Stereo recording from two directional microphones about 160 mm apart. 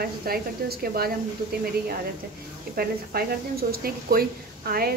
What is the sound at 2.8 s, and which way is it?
Speech, 70° right (ahead or behind).